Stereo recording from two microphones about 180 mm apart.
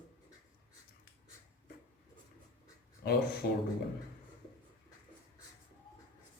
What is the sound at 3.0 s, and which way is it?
Speech, 65° left (ahead or behind).